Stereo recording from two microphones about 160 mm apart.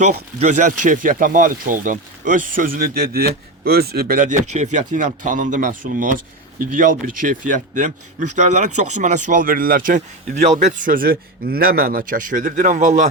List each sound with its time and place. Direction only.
0.3 s speech: 50° right (ahead or behind)